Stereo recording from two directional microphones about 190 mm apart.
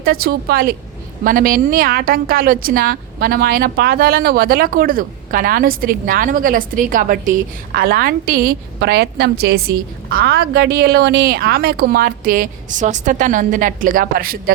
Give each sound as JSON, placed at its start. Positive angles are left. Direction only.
{"t": 0.0, "sound": "a woman's voice", "side_deg": -55}